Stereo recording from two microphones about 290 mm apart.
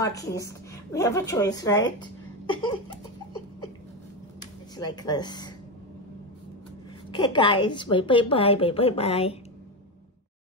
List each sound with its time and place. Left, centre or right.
0.0 s a woman's voice: centre
4.7 s a woman's voice: centre
7.1 s a woman's voice: centre